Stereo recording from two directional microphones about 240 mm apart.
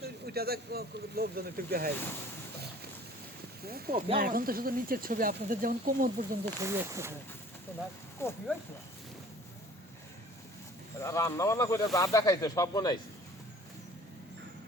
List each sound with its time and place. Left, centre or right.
0.0 s speech: right
3.6 s speech: right
6.6 s speech: centre
8.2 s speech: centre
11.0 s speech: centre